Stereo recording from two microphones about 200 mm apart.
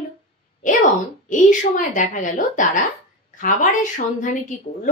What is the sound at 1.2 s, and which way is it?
A woman's voice, 40° left (ahead or behind).